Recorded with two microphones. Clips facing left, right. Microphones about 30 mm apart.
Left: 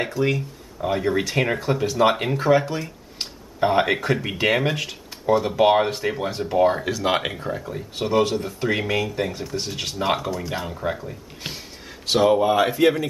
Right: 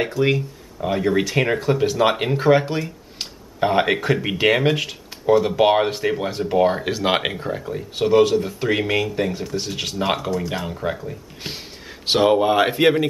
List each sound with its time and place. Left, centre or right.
0.2 s speech: right
0.7 s speech: centre; by 2.8 s right
2.8 s speech: centre
6.9 s speech: right
7.2 s speech: centre
12.1 s speech: right